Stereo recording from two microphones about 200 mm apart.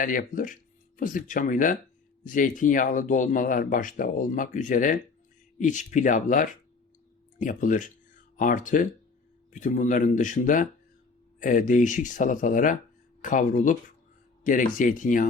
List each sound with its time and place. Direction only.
0.0 s speech: 40° left (ahead or behind)